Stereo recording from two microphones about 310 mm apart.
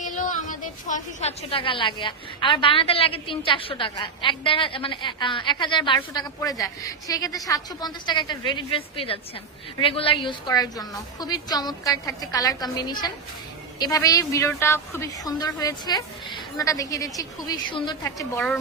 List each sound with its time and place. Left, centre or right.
0.0 s a woman's voice: left; by 18.6 s centre